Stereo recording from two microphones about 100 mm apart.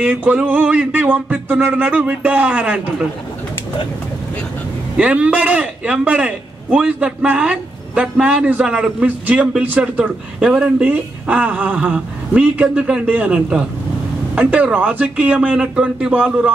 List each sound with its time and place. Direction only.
0.0 s a man's voice: 15° right (ahead or behind)
4.9 s a man's voice: 10° right (ahead or behind)